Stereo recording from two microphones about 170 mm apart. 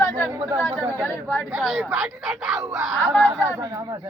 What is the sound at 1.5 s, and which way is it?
Speech, 5° right (ahead or behind).